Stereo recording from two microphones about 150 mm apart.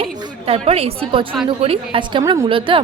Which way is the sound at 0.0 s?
40° right (ahead or behind).